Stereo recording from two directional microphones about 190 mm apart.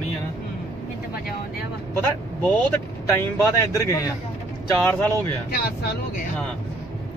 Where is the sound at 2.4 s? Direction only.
5° left (ahead or behind).